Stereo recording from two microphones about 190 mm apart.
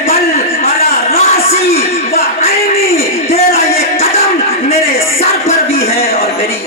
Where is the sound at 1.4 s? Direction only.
30° left (ahead or behind).